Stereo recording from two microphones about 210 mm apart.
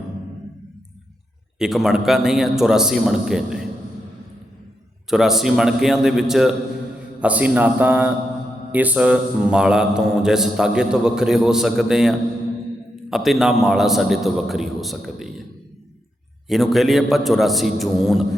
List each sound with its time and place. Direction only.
1.5 s mantra: centre (ahead or behind)
5.0 s mantra: centre (ahead or behind)
7.2 s a man's voice: 5° right (ahead or behind)
8.7 s mantra: 5° right (ahead or behind)
16.5 s mantra: centre (ahead or behind)